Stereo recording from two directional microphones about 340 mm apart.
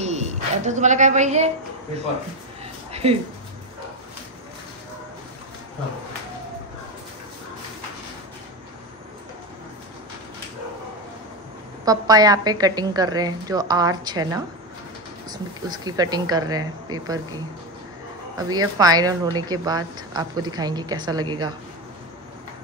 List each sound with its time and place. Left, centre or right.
0.0 s a woman's voice: centre
2.6 s a sound: centre
11.8 s speech: centre